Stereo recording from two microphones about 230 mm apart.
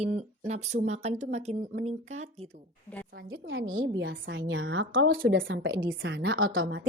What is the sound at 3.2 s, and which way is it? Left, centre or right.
A woman's voice, right.